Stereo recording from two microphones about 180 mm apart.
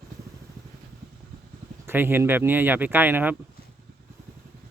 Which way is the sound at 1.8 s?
10° right (ahead or behind).